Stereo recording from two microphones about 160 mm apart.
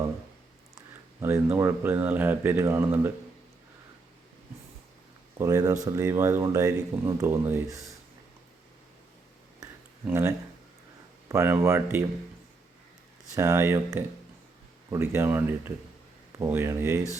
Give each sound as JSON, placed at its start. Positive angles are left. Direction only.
{"t": 0.8, "sound": "speech", "side_deg": -15}
{"t": 5.4, "sound": "speech", "side_deg": -20}
{"t": 10.1, "sound": "speech", "side_deg": -15}
{"t": 13.3, "sound": "speech", "side_deg": -15}